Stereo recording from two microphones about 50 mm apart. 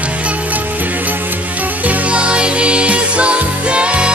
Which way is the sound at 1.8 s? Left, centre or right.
Right.